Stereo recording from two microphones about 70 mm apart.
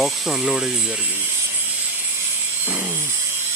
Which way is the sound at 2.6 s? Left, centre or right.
Right.